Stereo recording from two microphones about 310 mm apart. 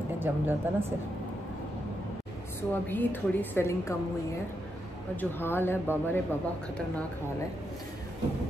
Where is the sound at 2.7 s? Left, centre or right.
Centre.